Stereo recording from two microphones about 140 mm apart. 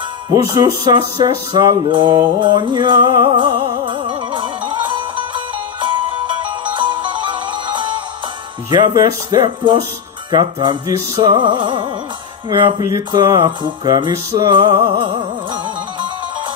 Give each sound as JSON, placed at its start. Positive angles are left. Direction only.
{"t": 0.3, "sound": "speech", "side_deg": -20}
{"t": 1.9, "sound": "music", "side_deg": -35}
{"t": 8.6, "sound": "speech", "side_deg": -30}
{"t": 10.3, "sound": "music", "side_deg": -35}
{"t": 10.9, "sound": "speech", "side_deg": -25}
{"t": 11.3, "sound": "music", "side_deg": -35}